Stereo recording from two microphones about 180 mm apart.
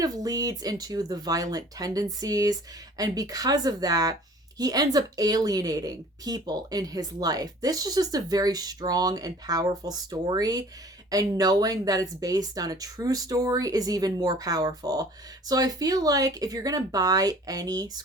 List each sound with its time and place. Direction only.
0.0 s a woman's voice: 20° right (ahead or behind)